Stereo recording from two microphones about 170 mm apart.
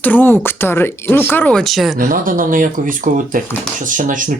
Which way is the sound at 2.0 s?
55° right (ahead or behind).